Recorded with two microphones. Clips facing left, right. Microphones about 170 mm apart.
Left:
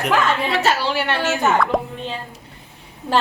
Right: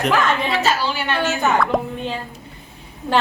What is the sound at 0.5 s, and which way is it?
Speech, 65° left (ahead or behind).